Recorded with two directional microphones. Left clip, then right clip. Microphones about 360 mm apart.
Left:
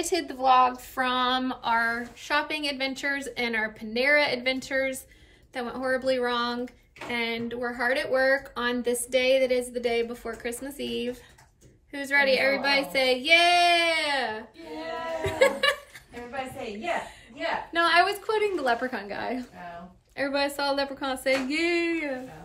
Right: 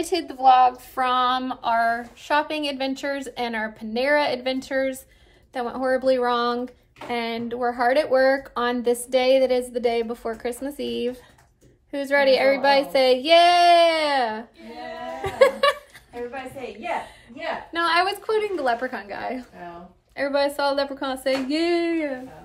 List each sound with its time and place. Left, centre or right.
0.0 s speech: centre
17.7 s a woman's voice: centre